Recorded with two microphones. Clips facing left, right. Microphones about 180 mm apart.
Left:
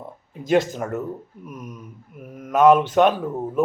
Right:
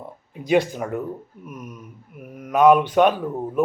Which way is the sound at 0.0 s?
5° right (ahead or behind).